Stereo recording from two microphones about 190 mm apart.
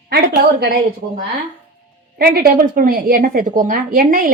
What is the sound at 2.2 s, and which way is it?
A woman's voice, 50° right (ahead or behind).